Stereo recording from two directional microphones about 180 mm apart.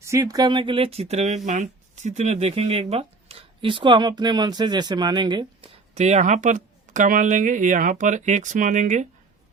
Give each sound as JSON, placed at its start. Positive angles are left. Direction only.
{"t": 0.0, "sound": "speech", "side_deg": -15}